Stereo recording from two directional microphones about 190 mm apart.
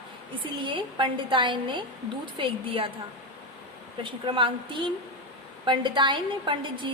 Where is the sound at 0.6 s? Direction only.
25° right (ahead or behind).